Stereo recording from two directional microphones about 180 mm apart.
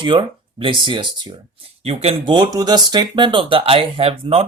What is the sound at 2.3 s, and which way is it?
Speech, 20° right (ahead or behind).